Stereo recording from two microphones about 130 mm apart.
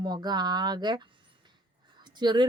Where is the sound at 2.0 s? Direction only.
35° right (ahead or behind).